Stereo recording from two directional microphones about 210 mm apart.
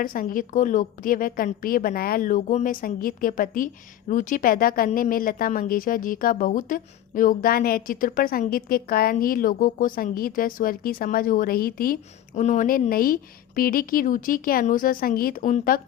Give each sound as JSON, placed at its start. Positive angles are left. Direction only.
{"t": 0.0, "sound": "a woman's voice", "side_deg": 40}